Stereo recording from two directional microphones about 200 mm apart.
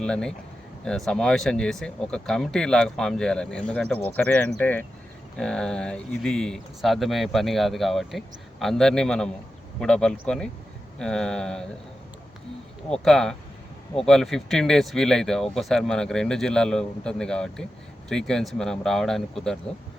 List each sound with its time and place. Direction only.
0.0 s speech: 5° left (ahead or behind)
12.9 s speech: centre (ahead or behind)